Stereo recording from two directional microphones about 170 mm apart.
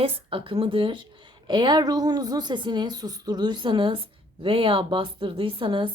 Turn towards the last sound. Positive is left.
turn(degrees=-30)  # may be behind; listen again after turning